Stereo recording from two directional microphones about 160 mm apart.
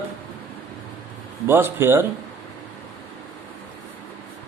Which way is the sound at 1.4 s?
15° right (ahead or behind).